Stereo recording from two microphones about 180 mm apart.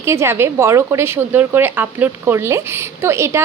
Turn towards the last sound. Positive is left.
turn(degrees=-15)  # may be behind; listen again after turning